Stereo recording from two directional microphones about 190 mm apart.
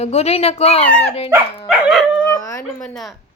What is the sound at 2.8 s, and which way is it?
Speech, centre (ahead or behind).